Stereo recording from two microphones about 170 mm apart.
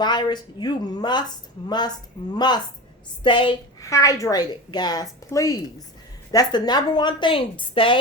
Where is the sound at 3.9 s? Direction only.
20° left (ahead or behind).